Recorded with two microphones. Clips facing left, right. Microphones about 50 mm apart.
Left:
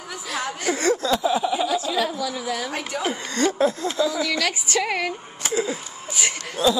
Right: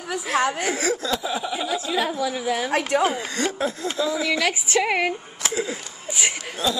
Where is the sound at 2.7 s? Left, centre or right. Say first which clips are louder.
Right 7 dB; right.